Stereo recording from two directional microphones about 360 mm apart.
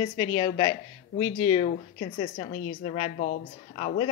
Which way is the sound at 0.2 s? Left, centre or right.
Centre.